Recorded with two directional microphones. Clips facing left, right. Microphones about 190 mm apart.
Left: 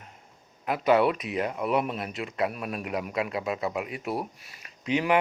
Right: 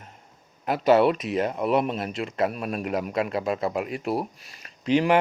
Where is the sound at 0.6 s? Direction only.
30° right (ahead or behind).